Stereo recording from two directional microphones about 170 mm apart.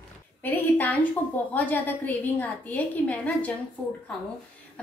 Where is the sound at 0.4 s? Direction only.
10° left (ahead or behind).